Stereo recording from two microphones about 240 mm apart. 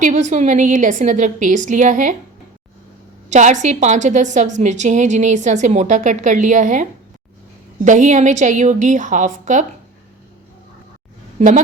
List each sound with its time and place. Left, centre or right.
0.0 s a woman's voice: right
3.2 s a woman's voice: right
7.9 s a woman's voice: right
11.3 s speech: right